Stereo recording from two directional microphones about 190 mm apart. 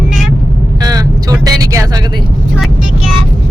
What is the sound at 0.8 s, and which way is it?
Vehicle, 20° right (ahead or behind).